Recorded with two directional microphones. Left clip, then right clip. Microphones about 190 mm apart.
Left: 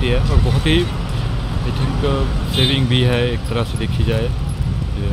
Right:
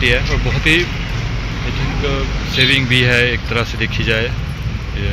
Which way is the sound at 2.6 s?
15° left (ahead or behind).